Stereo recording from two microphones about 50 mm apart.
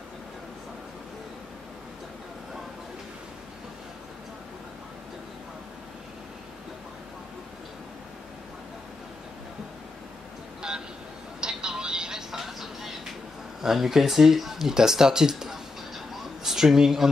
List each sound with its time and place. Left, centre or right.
10.6 s a sound: centre
11.4 s vehicle: centre
13.6 s a woman's voice: centre